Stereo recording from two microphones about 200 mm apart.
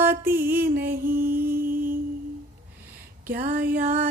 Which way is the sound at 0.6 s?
50° right (ahead or behind).